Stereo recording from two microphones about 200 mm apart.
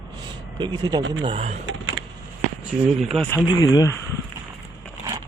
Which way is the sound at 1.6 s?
80° right.